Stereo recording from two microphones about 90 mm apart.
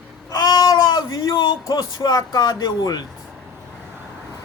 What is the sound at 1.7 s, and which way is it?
A man's voice, 50° left (ahead or behind).